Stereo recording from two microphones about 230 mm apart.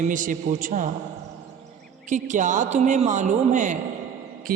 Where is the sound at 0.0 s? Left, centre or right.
Right.